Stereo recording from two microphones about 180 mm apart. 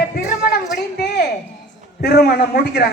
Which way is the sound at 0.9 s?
65° left (ahead or behind).